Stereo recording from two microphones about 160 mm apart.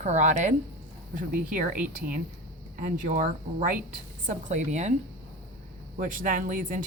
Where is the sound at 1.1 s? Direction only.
60° right (ahead or behind).